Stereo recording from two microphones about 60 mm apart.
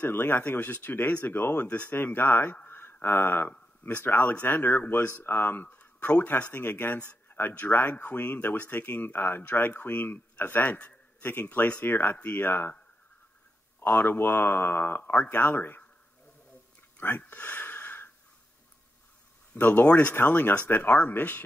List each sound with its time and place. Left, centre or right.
0.0 s a man's voice: left
13.7 s speech: left
17.0 s a sound: left
19.5 s speech: left